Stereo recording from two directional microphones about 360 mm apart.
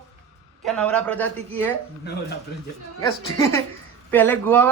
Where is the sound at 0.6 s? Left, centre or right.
Centre.